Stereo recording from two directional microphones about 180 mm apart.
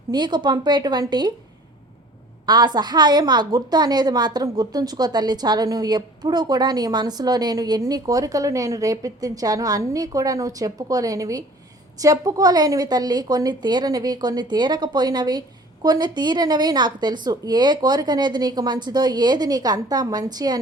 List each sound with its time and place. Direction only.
0.1 s a woman's voice: 25° right (ahead or behind)
2.5 s a woman's voice: 25° right (ahead or behind)